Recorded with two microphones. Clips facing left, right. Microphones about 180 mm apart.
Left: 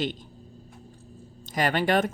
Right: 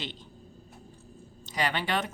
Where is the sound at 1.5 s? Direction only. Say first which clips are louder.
Left 6 dB; 45° left (ahead or behind).